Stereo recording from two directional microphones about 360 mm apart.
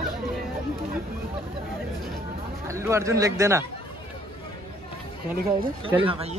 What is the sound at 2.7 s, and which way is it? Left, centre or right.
Speech, centre.